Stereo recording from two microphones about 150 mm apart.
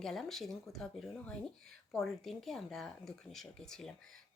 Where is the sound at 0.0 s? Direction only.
Centre (ahead or behind).